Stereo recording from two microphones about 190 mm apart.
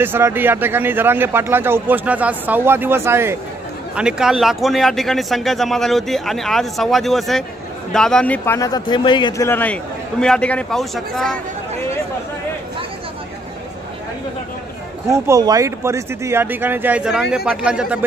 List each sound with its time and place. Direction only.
0.0 s a man's voice: 10° right (ahead or behind); by 8.5 s 5° left (ahead or behind)
8.5 s a man's voice: 20° left (ahead or behind)
9.5 s a man's voice: 10° left (ahead or behind)
15.0 s a man's voice: 15° right (ahead or behind)